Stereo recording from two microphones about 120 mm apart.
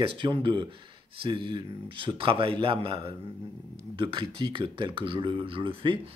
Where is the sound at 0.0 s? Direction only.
45° right (ahead or behind).